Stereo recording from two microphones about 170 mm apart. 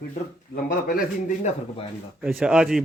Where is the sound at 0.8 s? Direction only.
50° left (ahead or behind).